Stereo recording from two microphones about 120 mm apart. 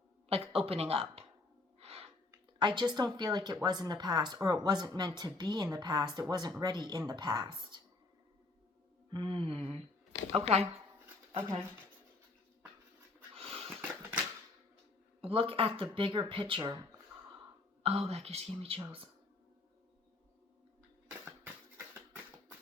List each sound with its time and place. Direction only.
0.3 s a woman's voice: 55° right (ahead or behind)
1.8 s gasp: 55° right (ahead or behind)
2.6 s speech: 40° right (ahead or behind)
9.0 s speech: 40° right (ahead or behind); by 10.7 s 60° right (ahead or behind)
13.3 s dog: 55° right (ahead or behind)
15.2 s speech: 50° right (ahead or behind)
17.8 s speech: 55° right (ahead or behind)